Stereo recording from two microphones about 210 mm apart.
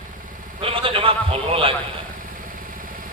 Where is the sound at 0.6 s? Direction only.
25° right (ahead or behind).